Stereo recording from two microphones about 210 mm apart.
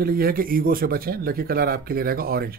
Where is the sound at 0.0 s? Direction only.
45° right (ahead or behind).